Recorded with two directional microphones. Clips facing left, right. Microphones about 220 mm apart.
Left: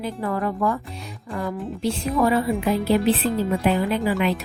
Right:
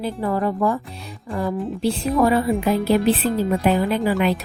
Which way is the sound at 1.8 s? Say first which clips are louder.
Right 2 dB; 40° right (ahead or behind).